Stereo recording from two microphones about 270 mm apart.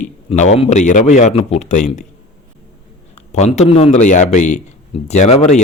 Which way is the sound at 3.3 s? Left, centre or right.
Left.